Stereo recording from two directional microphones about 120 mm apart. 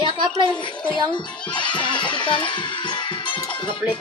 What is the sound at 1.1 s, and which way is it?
Speech, 40° left (ahead or behind).